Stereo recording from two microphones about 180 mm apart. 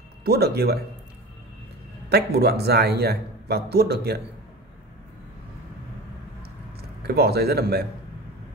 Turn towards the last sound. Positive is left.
turn(degrees=-60)  # may be behind; listen again after turning